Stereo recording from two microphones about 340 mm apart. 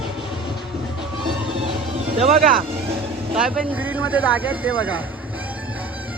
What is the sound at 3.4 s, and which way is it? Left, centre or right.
Speech, centre.